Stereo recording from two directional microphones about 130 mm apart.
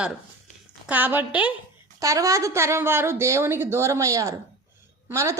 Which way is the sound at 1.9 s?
25° right (ahead or behind).